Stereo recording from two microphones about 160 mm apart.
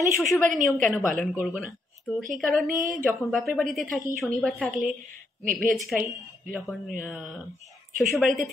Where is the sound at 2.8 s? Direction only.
55° right (ahead or behind).